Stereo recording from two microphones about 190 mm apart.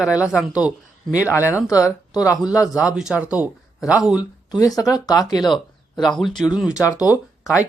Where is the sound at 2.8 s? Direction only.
5° right (ahead or behind).